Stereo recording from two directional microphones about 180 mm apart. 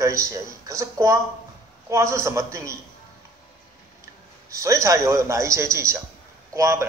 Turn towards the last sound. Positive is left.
turn(degrees=-15)  # may be behind; listen again after turning